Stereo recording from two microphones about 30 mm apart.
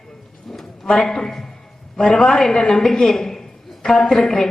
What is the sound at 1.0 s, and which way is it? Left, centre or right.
A woman's voice, centre.